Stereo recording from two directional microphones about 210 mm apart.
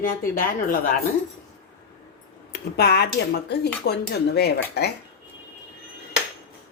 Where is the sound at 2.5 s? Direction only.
50° left (ahead or behind).